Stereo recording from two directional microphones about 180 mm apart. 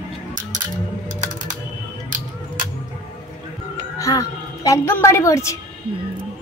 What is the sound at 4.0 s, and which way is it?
Music, 20° left (ahead or behind).